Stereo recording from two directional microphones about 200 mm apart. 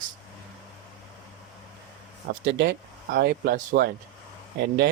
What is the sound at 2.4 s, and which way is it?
Speech, 55° right (ahead or behind).